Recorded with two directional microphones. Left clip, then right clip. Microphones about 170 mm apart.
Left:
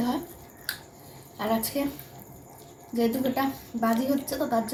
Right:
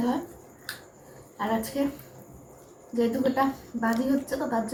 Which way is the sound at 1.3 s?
15° left (ahead or behind).